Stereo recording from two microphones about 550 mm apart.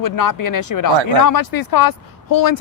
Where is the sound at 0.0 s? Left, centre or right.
Left.